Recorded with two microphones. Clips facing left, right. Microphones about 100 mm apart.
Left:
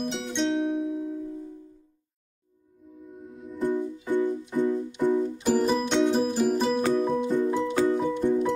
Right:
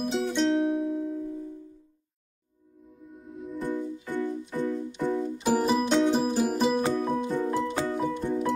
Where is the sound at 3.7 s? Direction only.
15° left (ahead or behind).